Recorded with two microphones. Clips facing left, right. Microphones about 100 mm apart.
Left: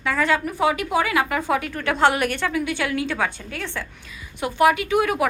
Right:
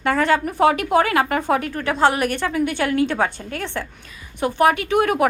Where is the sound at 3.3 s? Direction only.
50° right (ahead or behind).